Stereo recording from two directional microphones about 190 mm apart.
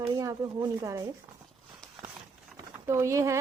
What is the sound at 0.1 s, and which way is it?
Speech, 20° right (ahead or behind).